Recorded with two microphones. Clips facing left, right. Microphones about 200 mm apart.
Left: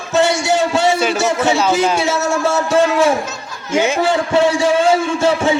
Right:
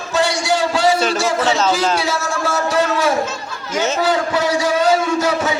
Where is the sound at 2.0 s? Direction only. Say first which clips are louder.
Left 4 dB; 25° left (ahead or behind).